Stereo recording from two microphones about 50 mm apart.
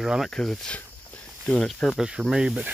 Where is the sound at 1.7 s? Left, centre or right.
Centre.